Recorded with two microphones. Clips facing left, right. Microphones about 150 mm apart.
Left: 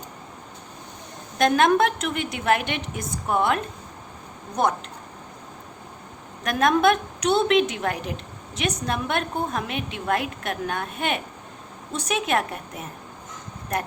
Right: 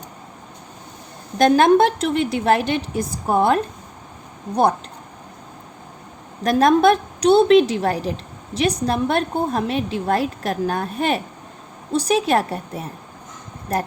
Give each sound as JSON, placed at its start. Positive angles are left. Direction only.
{"t": 1.4, "sound": "a woman's voice", "side_deg": -35}
{"t": 6.4, "sound": "a woman's voice", "side_deg": -35}